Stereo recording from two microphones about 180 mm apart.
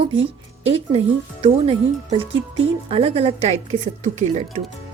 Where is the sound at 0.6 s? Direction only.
35° right (ahead or behind).